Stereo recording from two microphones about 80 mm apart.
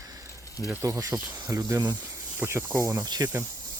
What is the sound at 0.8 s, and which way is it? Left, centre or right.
Speech, right.